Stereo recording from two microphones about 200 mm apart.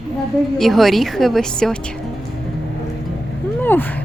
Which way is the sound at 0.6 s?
Centre (ahead or behind).